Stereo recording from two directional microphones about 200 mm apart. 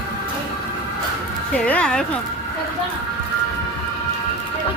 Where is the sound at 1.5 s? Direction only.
5° left (ahead or behind).